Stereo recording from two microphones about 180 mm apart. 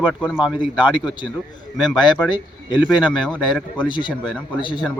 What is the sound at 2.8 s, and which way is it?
Speech, 5° right (ahead or behind).